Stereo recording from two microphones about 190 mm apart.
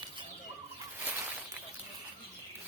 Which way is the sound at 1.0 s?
10° right (ahead or behind).